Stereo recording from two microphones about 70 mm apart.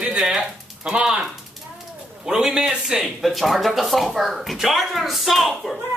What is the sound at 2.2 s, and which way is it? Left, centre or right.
Speech, centre.